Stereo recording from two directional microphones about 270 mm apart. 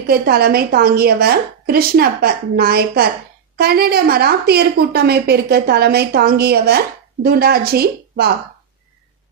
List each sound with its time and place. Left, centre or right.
0.0 s a woman's voice: right